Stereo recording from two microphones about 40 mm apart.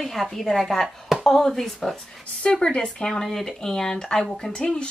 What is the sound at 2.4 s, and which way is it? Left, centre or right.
Speech, left.